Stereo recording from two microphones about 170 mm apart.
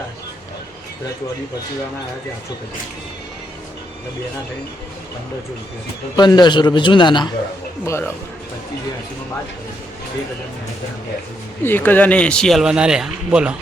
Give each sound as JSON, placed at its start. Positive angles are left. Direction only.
{"t": 6.1, "sound": "a man's voice", "side_deg": 25}
{"t": 7.9, "sound": "speech", "side_deg": 15}
{"t": 11.6, "sound": "speech", "side_deg": 10}